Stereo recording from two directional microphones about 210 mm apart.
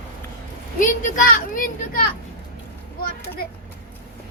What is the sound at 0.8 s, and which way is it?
A child's voice, 40° left (ahead or behind).